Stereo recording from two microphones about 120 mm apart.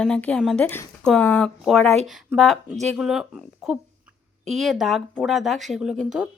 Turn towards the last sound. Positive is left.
turn(degrees=-5)  # may be behind; listen again after turning